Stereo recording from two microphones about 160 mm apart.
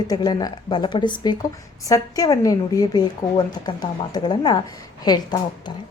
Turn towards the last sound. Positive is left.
turn(degrees=25)  # may be behind; listen again after turning